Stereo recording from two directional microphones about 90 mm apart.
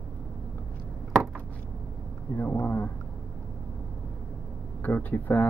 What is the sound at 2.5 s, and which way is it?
Speech, 20° left (ahead or behind).